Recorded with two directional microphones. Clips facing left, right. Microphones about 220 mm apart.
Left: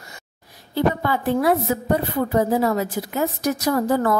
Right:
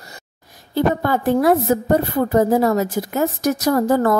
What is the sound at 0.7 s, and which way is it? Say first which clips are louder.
A woman's voice: right 3 dB; 45° right (ahead or behind).